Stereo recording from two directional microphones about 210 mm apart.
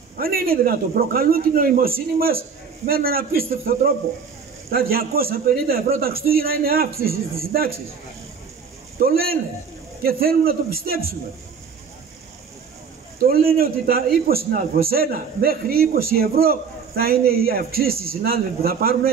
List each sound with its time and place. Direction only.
0.2 s a man's voice: 45° right (ahead or behind)
9.0 s a man's voice: 45° right (ahead or behind)
13.2 s a man's voice: 45° right (ahead or behind)